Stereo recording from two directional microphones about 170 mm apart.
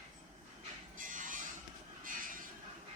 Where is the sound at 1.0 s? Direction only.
50° right (ahead or behind).